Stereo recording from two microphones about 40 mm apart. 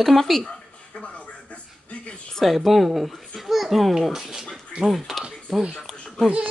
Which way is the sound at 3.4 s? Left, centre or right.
Centre.